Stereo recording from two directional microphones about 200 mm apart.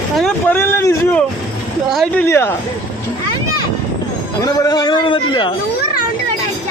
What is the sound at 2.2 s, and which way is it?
Speech, 10° left (ahead or behind).